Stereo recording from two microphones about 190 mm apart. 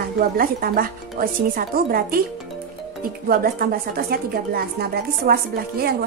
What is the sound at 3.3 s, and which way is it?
A woman's voice, 50° right (ahead or behind).